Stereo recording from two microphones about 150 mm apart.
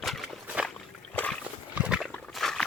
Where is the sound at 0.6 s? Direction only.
10° left (ahead or behind).